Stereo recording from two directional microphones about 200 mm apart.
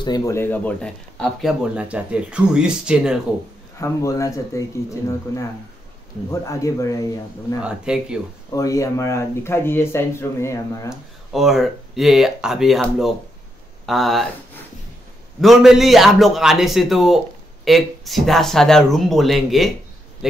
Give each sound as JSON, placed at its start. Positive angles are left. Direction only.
{"t": 0.0, "sound": "speech", "side_deg": 15}
{"t": 1.8, "sound": "speech", "side_deg": -5}
{"t": 3.8, "sound": "speech", "side_deg": 15}
{"t": 6.4, "sound": "speech", "side_deg": 15}
{"t": 7.6, "sound": "speech", "side_deg": -5}
{"t": 8.5, "sound": "speech", "side_deg": 15}
{"t": 10.9, "sound": "speech", "side_deg": 0}